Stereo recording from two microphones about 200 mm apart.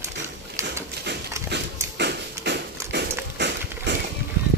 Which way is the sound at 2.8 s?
15° right (ahead or behind).